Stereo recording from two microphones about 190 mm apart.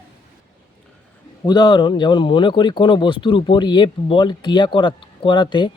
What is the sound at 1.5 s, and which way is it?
Speech, 20° left (ahead or behind).